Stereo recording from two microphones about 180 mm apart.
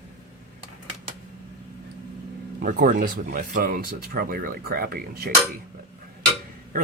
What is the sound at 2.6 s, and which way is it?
Speech, 50° right (ahead or behind).